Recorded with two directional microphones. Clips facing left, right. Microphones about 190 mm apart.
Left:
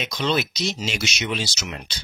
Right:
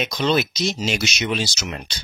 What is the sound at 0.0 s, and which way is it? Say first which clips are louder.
Speech: right 3 dB; 45° right (ahead or behind).